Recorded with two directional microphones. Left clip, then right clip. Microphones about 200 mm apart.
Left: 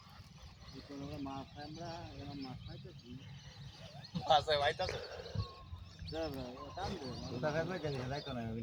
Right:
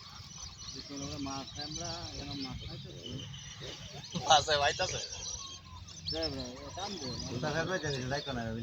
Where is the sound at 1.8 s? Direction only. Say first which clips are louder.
Right 2 dB; 25° left (ahead or behind).